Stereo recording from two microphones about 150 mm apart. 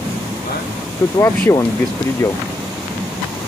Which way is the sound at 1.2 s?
20° left (ahead or behind).